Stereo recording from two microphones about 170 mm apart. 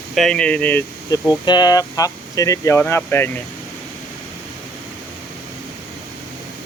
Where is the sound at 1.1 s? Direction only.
25° left (ahead or behind).